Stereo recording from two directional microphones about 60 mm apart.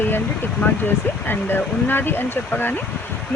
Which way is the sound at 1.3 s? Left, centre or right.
Left.